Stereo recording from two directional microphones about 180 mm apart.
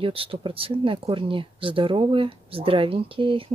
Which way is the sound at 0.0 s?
30° right (ahead or behind).